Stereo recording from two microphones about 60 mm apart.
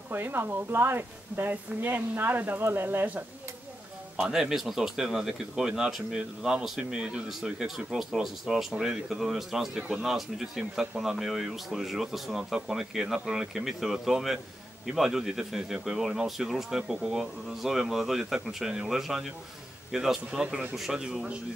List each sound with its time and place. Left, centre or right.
0.1 s speech: right
4.2 s speech: centre
20.2 s a man's voice: right
20.7 s speech: centre